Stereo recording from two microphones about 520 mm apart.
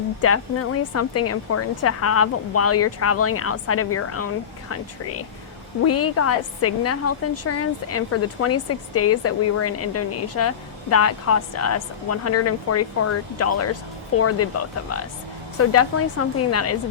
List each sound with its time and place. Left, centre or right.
0.2 s a woman's voice: left